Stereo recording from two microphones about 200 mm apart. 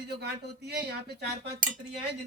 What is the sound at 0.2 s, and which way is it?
Speech, 55° right (ahead or behind).